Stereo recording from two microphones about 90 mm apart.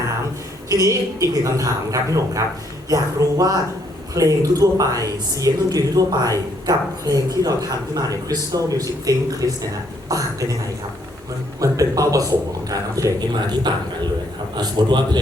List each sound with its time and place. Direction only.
0.7 s speech: 40° right (ahead or behind)
11.6 s speech: 40° right (ahead or behind)
13.3 s a man's voice: 55° right (ahead or behind)